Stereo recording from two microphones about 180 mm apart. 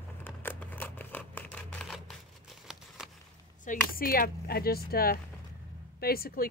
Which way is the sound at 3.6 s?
50° left (ahead or behind).